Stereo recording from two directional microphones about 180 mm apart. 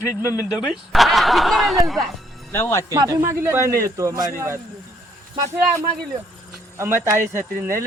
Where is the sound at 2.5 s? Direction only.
15° left (ahead or behind).